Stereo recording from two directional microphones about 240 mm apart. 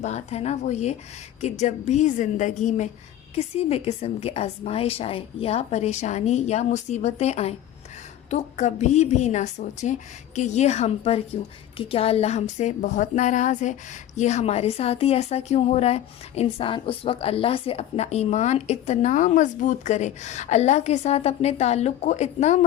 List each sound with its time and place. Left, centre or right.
0.0 s a woman's voice: left